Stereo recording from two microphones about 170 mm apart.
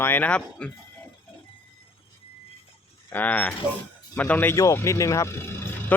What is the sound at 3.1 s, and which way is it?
Speech, 10° left (ahead or behind).